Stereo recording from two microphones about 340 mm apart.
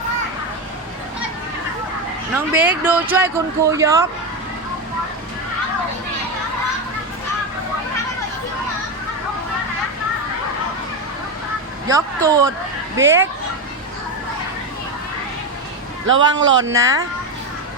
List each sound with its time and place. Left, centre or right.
2.3 s speech: centre
11.9 s speech: centre
16.0 s speech: right
16.7 s speech: centre